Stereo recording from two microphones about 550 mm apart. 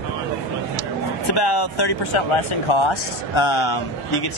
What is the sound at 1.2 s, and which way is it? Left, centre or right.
Speech, left.